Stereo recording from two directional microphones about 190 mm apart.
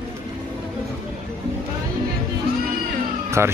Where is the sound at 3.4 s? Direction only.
15° right (ahead or behind).